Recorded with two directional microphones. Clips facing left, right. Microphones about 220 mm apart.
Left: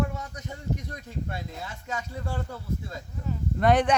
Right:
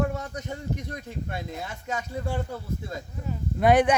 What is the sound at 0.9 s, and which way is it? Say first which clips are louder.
Speech: right 1 dB; 20° right (ahead or behind).